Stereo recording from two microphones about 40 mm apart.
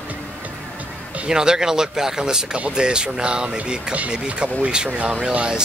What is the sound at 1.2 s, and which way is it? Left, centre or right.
Speech, centre.